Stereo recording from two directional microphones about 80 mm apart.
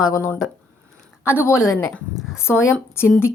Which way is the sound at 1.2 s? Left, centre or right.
Left.